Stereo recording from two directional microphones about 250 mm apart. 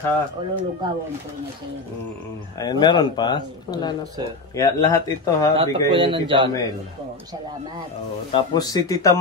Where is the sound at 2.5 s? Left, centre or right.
Centre.